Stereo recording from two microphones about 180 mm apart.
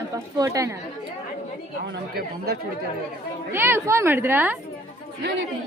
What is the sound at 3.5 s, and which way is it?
A woman's voice, 10° right (ahead or behind).